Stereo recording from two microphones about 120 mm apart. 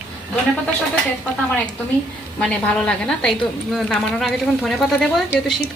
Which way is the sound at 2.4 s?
5° left (ahead or behind).